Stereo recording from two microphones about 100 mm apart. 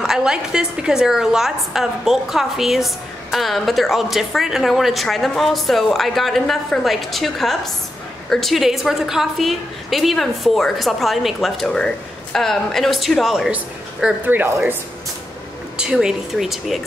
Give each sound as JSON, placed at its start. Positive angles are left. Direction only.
{"t": 0.0, "sound": "a woman's voice", "side_deg": -5}
{"t": 14.0, "sound": "speech", "side_deg": -20}
{"t": 15.8, "sound": "a woman's voice", "side_deg": -5}